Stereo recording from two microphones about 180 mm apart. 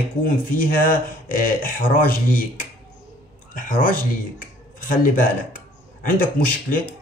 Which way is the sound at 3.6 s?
50° left (ahead or behind).